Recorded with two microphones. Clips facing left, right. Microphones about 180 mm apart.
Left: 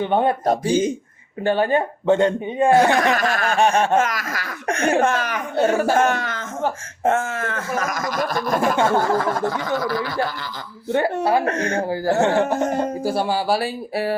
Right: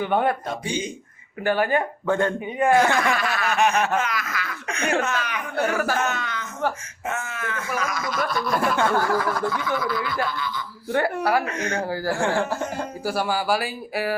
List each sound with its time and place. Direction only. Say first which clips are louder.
0.0 s speech: left 3 dB; 25° left (ahead or behind)
0.4 s speech: left 10 dB; 35° left (ahead or behind)
1.5 s speech: left 3 dB; 25° left (ahead or behind)
3.0 s a sound: left 4 dB; 45° left (ahead or behind)
3.5 s speech: left 3 dB; 30° left (ahead or behind)
3.9 s speech: left 5 dB; 45° left (ahead or behind)
4.9 s a sound: left 5 dB; 50° left (ahead or behind)
5.5 s speech: left 6 dB; 25° left (ahead or behind)
6.0 s a sound: left 7 dB; 45° left (ahead or behind)
8.7 s speech: left 3 dB; 25° left (ahead or behind)
9.6 s speech: left 3 dB; 40° left (ahead or behind)
10.9 s speech: left 3 dB; 25° left (ahead or behind)